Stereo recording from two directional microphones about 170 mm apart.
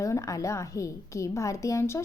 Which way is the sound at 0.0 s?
20° left (ahead or behind).